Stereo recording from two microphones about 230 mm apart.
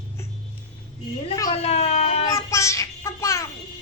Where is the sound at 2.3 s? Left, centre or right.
Centre.